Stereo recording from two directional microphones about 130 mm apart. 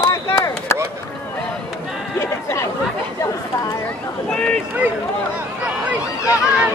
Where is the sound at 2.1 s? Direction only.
20° left (ahead or behind).